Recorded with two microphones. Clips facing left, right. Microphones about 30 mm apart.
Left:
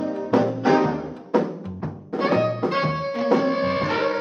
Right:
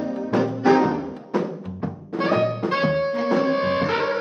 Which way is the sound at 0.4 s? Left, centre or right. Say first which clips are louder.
Right 2 dB; centre.